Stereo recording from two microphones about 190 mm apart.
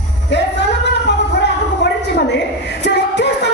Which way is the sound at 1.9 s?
65° left (ahead or behind).